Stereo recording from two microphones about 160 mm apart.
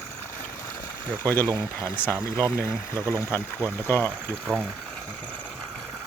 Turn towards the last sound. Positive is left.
turn(degrees=10)  # may be behind; listen again after turning